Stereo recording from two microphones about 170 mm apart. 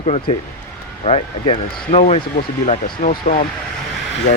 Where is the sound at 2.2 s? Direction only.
55° left (ahead or behind).